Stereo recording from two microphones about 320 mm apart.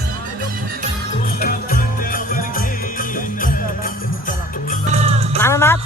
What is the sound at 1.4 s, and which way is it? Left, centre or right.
Music, left.